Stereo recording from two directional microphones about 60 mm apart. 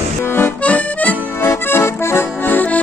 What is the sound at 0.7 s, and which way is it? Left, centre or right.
Music, left.